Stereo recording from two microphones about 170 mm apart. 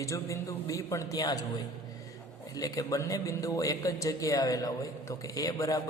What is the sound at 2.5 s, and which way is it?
A man's voice, 20° left (ahead or behind).